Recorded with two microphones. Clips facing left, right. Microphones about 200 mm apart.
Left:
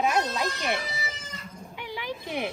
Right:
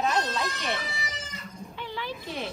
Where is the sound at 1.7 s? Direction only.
15° left (ahead or behind).